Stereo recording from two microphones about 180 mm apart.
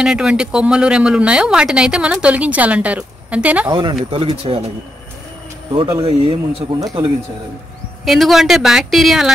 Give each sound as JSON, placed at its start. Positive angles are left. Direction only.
{"t": 0.0, "sound": "speech", "side_deg": -5}
{"t": 4.1, "sound": "speech", "side_deg": -35}
{"t": 5.7, "sound": "speech", "side_deg": -25}
{"t": 8.0, "sound": "speech", "side_deg": 0}